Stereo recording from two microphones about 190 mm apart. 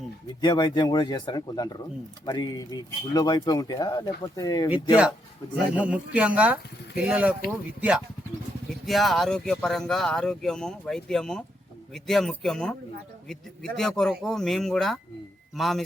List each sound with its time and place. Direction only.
0.4 s speech: 20° left (ahead or behind)
5.7 s speech: 5° right (ahead or behind)